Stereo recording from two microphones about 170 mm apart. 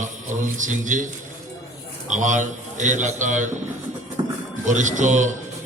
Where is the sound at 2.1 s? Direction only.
45° right (ahead or behind).